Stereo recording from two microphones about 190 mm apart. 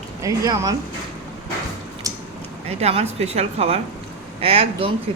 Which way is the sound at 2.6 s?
35° right (ahead or behind).